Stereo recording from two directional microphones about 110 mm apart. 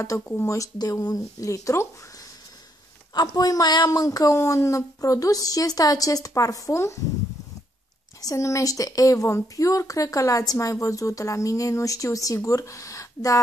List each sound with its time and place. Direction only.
0.2 s speech: 15° left (ahead or behind)
0.5 s speech: 30° left (ahead or behind)
3.2 s a woman's voice: 35° left (ahead or behind)
8.2 s a woman's voice: 30° left (ahead or behind)